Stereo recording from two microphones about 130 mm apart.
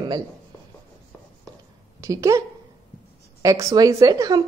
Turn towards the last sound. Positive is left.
turn(degrees=-25)  # may be behind; listen again after turning